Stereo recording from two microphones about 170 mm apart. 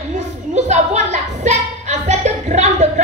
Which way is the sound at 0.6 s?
45° right (ahead or behind).